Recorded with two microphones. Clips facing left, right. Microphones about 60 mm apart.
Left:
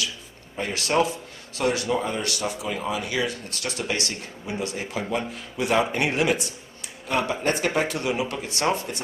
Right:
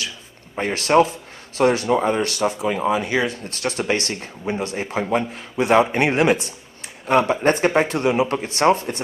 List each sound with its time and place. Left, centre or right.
0.6 s speech: right